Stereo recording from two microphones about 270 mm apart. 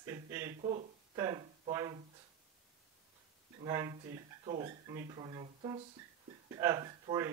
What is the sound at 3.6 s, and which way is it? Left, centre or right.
Speech, centre.